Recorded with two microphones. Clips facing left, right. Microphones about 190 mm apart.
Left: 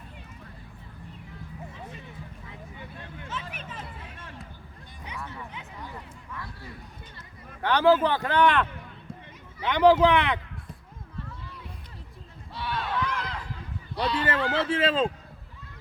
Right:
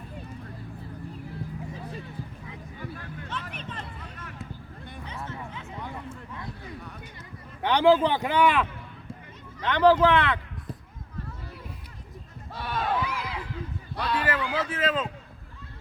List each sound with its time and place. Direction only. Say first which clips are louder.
2.7 s vehicle: right 7 dB; 20° left (ahead or behind)
3.5 s music: right 2 dB; 5° left (ahead or behind)
6.1 s a sound: right 3 dB; 20° right (ahead or behind)
7.6 s speech: right 1 dB; 15° right (ahead or behind)
9.6 s speech: left 1 dB; 10° left (ahead or behind)
12.5 s a sound: right 2 dB; 45° right (ahead or behind)
13.0 s run: even; 5° right (ahead or behind)
13.9 s a sound: left 2 dB; 50° right (ahead or behind)
14.3 s speech: left 2 dB; 30° left (ahead or behind)